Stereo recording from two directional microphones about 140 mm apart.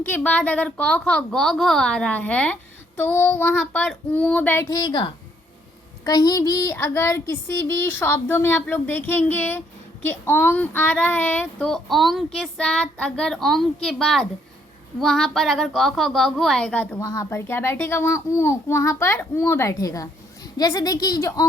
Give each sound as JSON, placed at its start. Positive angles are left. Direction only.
{"t": 0.0, "sound": "child singing", "side_deg": 10}
{"t": 4.7, "sound": "a woman's voice", "side_deg": 30}
{"t": 6.1, "sound": "child singing", "side_deg": 30}